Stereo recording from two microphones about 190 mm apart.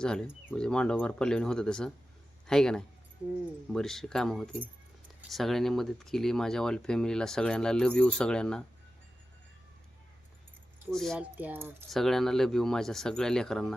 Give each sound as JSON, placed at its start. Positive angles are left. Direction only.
{"t": 0.0, "sound": "speech", "side_deg": 5}
{"t": 10.9, "sound": "speech", "side_deg": 0}
{"t": 11.3, "sound": "speech", "side_deg": -10}
{"t": 11.9, "sound": "speech", "side_deg": 0}